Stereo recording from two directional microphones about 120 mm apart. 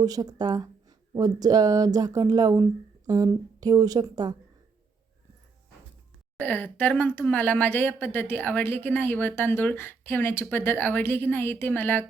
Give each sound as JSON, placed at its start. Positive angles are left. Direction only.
{"t": 0.0, "sound": "speech", "side_deg": -30}
{"t": 6.4, "sound": "a woman's voice", "side_deg": 15}